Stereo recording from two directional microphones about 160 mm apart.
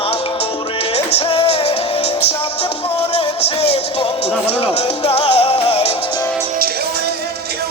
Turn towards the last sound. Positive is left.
turn(degrees=40)  # may be behind; listen again after turning